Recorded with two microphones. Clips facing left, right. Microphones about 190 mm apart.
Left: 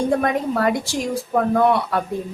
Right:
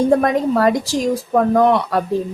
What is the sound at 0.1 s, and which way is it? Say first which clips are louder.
Speech: right 5 dB; 40° right (ahead or behind).